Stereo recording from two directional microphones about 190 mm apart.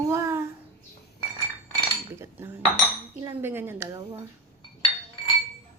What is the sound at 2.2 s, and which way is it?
Cutlery, 10° right (ahead or behind).